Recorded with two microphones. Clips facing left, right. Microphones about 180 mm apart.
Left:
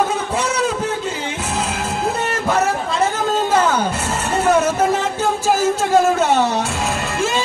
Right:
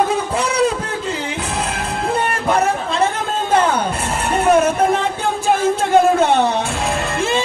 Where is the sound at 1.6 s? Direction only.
30° right (ahead or behind).